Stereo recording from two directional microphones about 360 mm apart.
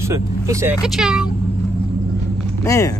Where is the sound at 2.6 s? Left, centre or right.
Centre.